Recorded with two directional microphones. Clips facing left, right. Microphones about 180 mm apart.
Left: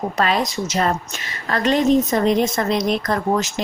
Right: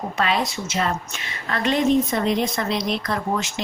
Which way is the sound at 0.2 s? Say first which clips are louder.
Left 2 dB; 40° left (ahead or behind).